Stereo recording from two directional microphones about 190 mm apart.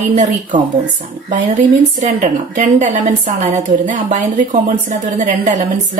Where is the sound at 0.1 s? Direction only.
40° right (ahead or behind).